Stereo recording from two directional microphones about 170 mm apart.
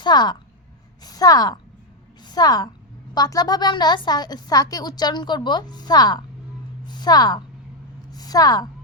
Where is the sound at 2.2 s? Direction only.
25° left (ahead or behind).